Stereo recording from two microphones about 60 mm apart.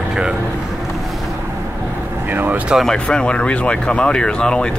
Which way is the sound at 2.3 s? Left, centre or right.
Right.